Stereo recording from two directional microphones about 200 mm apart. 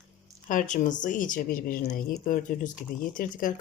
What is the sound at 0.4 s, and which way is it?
Speech, 40° left (ahead or behind).